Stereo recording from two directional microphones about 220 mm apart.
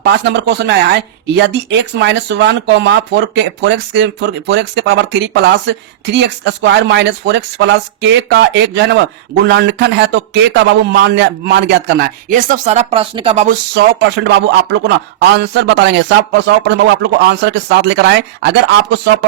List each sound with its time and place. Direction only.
0.0 s speech: 50° right (ahead or behind); by 13.6 s 30° right (ahead or behind)
14.3 s speech: 50° right (ahead or behind)